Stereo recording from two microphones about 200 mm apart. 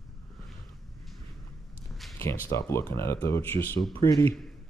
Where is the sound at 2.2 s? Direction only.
15° left (ahead or behind).